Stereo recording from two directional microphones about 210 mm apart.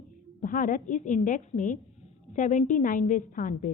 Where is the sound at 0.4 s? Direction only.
40° left (ahead or behind).